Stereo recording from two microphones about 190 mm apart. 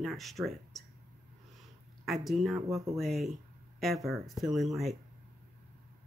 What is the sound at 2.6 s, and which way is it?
Speech, 15° right (ahead or behind).